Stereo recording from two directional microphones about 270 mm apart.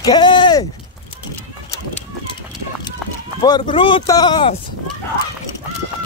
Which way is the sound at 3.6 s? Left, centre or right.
Centre.